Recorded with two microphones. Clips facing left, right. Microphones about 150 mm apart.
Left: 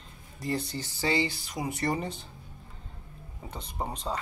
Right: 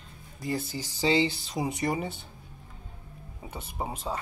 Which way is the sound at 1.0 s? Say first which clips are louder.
Right 4 dB; 20° right (ahead or behind).